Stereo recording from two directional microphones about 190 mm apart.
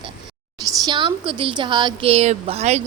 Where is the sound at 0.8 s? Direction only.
25° right (ahead or behind).